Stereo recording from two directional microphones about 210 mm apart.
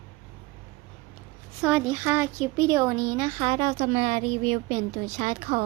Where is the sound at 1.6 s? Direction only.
5° right (ahead or behind).